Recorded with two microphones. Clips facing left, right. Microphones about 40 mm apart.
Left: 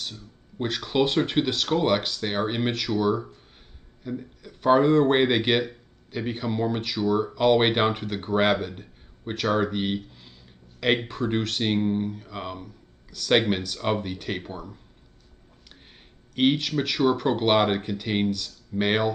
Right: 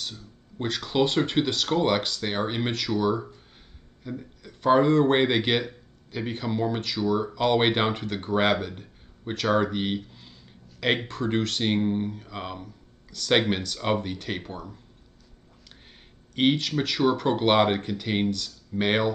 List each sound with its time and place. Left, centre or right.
0.6 s speech: centre
16.3 s speech: centre